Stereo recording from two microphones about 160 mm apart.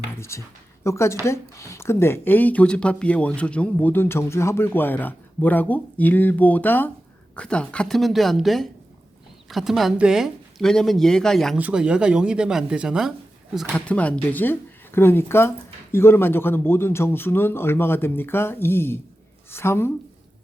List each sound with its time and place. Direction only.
0.2 s speech: 15° left (ahead or behind); by 13.7 s 5° right (ahead or behind)
13.7 s speech: 10° left (ahead or behind)